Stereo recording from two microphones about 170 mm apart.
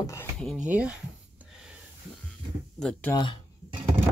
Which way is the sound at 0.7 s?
10° right (ahead or behind).